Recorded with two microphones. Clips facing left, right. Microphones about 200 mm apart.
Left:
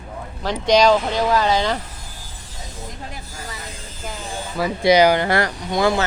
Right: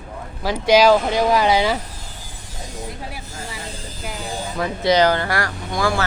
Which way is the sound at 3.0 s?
10° right (ahead or behind).